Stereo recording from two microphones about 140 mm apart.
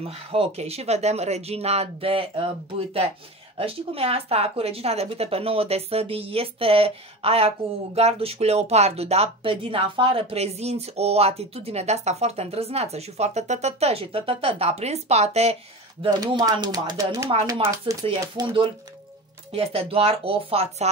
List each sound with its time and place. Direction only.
0.0 s speech: 45° right (ahead or behind)
16.0 s speech: 35° right (ahead or behind)
17.9 s speech: 40° right (ahead or behind)
19.5 s speech: 45° right (ahead or behind)